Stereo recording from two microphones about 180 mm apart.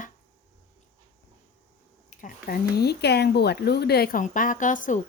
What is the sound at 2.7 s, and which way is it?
A woman's voice, 65° left (ahead or behind).